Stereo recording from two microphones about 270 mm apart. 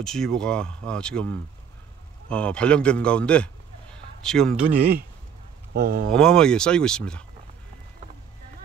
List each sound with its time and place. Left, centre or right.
0.0 s speech: centre
5.7 s speech: right
6.1 s speech: centre